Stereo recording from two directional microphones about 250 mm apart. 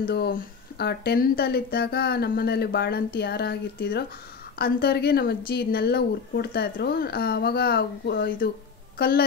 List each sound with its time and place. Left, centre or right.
0.7 s a woman's voice: left